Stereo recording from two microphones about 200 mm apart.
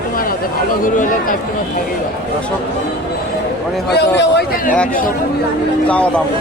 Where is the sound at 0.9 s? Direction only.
40° left (ahead or behind).